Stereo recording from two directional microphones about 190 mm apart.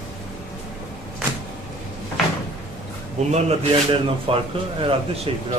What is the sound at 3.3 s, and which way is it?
Speech, 30° right (ahead or behind).